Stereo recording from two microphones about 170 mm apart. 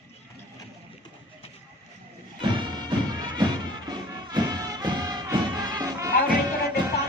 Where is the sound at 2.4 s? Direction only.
25° right (ahead or behind).